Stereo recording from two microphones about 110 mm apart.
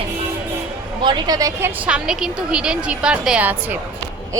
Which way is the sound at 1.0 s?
45° right (ahead or behind).